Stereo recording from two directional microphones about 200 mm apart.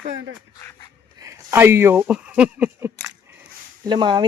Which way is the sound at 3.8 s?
25° right (ahead or behind).